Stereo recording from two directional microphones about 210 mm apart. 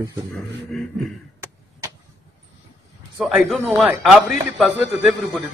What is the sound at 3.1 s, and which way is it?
A man's voice, centre (ahead or behind).